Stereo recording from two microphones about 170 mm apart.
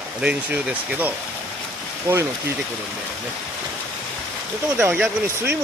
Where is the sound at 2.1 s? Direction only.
20° right (ahead or behind).